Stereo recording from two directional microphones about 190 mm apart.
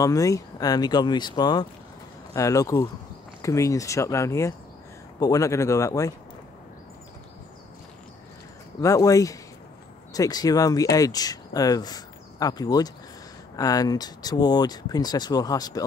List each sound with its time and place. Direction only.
0.0 s speech: 15° left (ahead or behind)
8.8 s speech: 15° left (ahead or behind)